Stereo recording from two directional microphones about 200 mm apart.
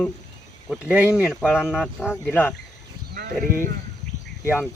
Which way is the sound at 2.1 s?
10° left (ahead or behind).